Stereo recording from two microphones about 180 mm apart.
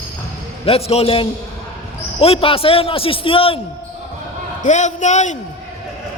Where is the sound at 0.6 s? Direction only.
35° left (ahead or behind).